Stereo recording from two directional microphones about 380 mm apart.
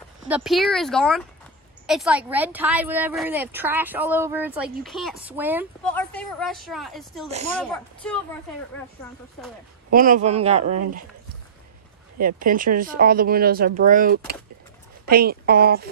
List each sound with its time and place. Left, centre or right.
0.3 s speech: centre
7.2 s speech: centre
7.5 s speech: centre
9.8 s speech: right
12.2 s speech: right